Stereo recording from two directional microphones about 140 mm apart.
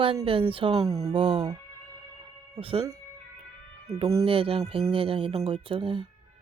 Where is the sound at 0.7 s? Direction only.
25° right (ahead or behind).